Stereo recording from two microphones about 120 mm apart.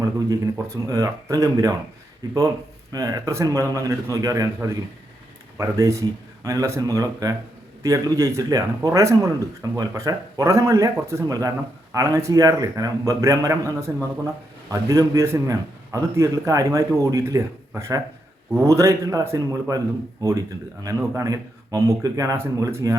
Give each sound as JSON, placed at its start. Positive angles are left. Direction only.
{"t": 0.3, "sound": "speech", "side_deg": -30}
{"t": 20.8, "sound": "speech", "side_deg": -30}